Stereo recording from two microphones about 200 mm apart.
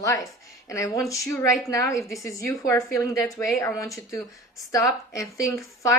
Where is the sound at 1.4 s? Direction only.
15° left (ahead or behind).